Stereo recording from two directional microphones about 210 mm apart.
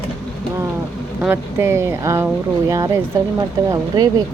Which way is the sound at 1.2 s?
10° right (ahead or behind).